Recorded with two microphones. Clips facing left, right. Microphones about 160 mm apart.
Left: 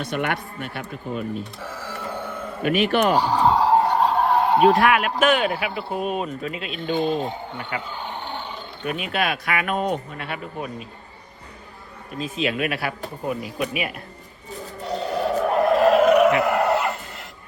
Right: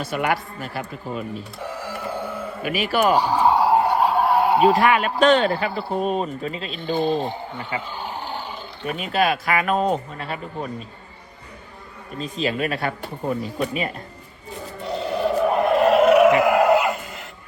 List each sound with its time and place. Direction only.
1.6 s a sound: 15° right (ahead or behind)
2.7 s speech: 5° right (ahead or behind)
9.7 s speech: 40° right (ahead or behind)
10.2 s speech: 5° left (ahead or behind)
12.2 s speech: centre (ahead or behind)
14.8 s a sound: centre (ahead or behind)